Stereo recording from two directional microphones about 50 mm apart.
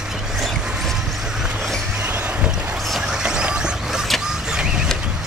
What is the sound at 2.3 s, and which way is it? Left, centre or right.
Boat, centre.